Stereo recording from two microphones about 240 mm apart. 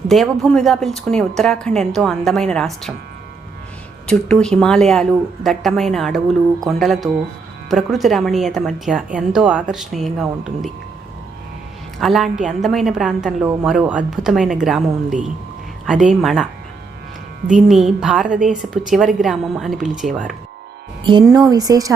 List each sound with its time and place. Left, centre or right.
0.1 s speech: centre
4.0 s speech: centre
11.9 s speech: centre
17.7 s speech: centre
21.0 s speech: centre